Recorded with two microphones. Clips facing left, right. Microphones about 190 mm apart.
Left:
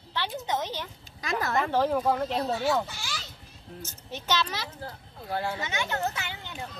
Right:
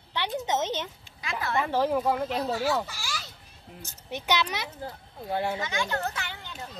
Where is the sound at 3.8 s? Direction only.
15° right (ahead or behind).